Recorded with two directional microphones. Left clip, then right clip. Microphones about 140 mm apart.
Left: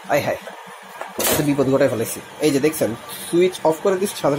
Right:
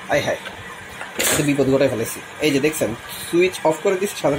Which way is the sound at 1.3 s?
10° left (ahead or behind).